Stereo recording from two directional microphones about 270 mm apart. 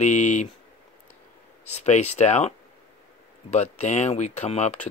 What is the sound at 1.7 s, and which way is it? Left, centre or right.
Speech, left.